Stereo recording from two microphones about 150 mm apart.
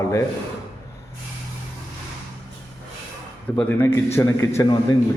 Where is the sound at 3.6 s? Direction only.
15° left (ahead or behind).